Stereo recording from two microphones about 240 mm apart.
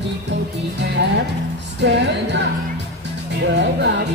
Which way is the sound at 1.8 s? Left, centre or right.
Right.